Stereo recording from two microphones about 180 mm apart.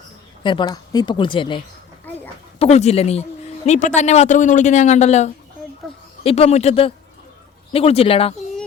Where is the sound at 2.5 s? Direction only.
35° left (ahead or behind).